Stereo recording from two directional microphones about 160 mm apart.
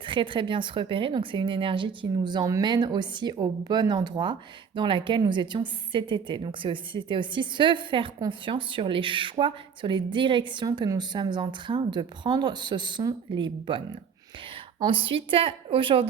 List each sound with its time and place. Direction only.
0.0 s speech: 30° right (ahead or behind)